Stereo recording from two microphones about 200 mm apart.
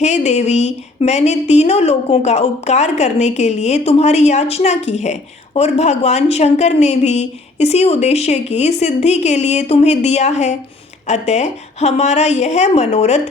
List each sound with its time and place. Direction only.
0.0 s speech: 35° left (ahead or behind)